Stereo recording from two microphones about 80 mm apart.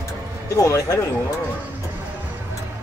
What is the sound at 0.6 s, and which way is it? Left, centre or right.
Speech, left.